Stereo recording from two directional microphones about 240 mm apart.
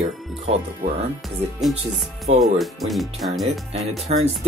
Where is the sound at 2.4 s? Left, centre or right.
Centre.